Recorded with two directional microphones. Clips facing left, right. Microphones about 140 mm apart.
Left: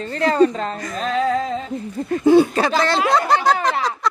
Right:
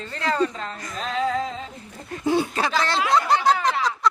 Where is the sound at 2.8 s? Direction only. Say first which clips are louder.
Left 2 dB; 60° left (ahead or behind).